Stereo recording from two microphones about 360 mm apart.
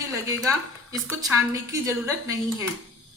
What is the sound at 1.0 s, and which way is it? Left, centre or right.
A woman's voice, centre.